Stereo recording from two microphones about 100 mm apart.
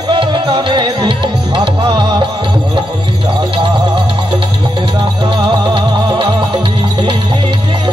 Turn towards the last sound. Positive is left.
turn(degrees=-50)  # may be behind; listen again after turning